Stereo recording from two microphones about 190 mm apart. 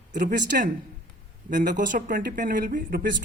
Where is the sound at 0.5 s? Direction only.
50° right (ahead or behind).